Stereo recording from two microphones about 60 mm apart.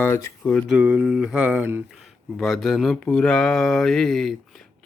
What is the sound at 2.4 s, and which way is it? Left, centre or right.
Speech, centre.